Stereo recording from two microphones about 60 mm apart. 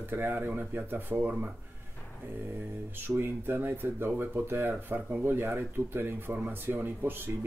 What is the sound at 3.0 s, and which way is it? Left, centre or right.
Speech, right.